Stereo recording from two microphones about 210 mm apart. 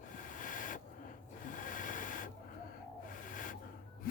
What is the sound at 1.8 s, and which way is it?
Printer, 40° left (ahead or behind).